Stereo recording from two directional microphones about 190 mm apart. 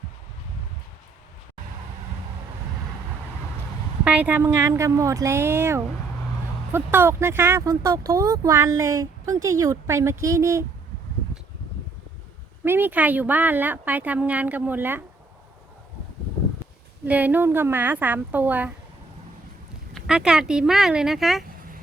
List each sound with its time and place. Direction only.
4.0 s speech: 10° right (ahead or behind)
12.6 s speech: 10° right (ahead or behind)
17.1 s speech: 10° right (ahead or behind)
19.9 s speech: 5° right (ahead or behind)